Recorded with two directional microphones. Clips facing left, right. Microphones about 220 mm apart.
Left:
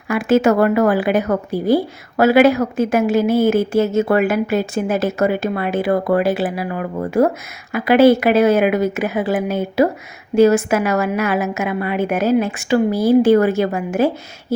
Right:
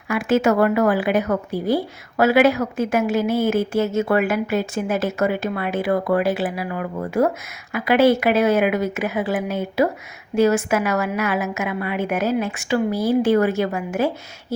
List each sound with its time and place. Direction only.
0.1 s speech: 35° left (ahead or behind)